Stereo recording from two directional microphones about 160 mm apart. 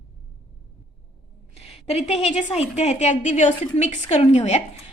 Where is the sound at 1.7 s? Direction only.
40° left (ahead or behind).